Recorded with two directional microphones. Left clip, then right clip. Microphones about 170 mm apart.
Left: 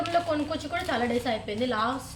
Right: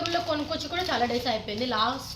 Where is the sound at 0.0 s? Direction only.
10° left (ahead or behind).